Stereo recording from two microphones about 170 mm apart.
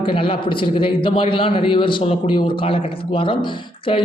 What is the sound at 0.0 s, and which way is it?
A man's voice, 30° left (ahead or behind).